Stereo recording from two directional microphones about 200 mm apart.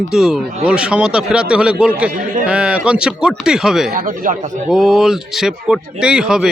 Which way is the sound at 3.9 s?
40° right (ahead or behind).